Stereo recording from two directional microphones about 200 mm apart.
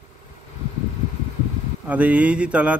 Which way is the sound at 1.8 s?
5° right (ahead or behind).